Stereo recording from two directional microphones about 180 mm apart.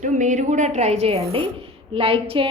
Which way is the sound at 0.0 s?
45° right (ahead or behind).